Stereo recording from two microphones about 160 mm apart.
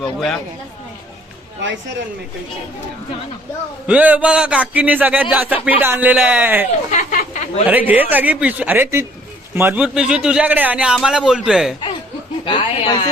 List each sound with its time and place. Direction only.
0.0 s a man's voice: 5° left (ahead or behind)
3.8 s a man's voice: 10° right (ahead or behind)
6.9 s a sound: 55° left (ahead or behind)
7.7 s a man's voice: 10° right (ahead or behind)
12.5 s speech: 30° left (ahead or behind)